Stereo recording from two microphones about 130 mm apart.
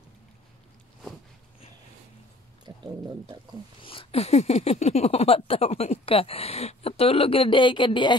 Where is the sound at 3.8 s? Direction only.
45° left (ahead or behind).